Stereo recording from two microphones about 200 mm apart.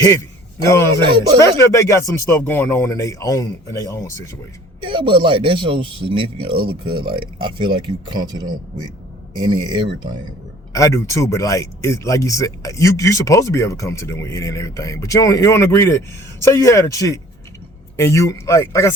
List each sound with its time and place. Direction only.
0.9 s speech: 25° right (ahead or behind)
1.5 s speech: 15° left (ahead or behind)
4.9 s speech: 25° right (ahead or behind)
10.7 s speech: 15° left (ahead or behind)